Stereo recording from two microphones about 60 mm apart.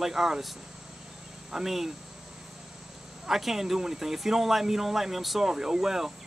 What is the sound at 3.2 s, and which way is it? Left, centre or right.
Speech, centre.